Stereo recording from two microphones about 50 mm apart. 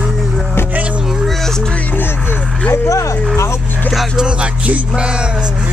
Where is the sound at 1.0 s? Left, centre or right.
Centre.